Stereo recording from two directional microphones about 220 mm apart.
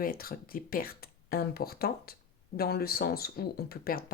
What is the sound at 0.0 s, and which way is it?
Speech, 40° left (ahead or behind).